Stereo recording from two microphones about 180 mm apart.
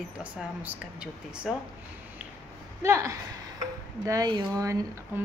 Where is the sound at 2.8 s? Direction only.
15° right (ahead or behind).